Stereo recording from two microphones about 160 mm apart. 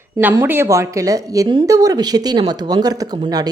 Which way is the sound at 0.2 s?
10° right (ahead or behind).